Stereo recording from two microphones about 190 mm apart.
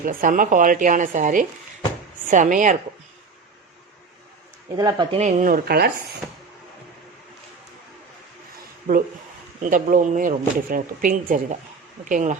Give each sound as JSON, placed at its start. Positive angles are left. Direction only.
{"t": 0.0, "sound": "speech", "side_deg": -45}
{"t": 4.8, "sound": "speech", "side_deg": -20}
{"t": 5.1, "sound": "speech", "side_deg": -40}
{"t": 9.6, "sound": "speech", "side_deg": -45}